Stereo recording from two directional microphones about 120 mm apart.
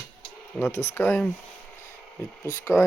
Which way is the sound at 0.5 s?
15° left (ahead or behind).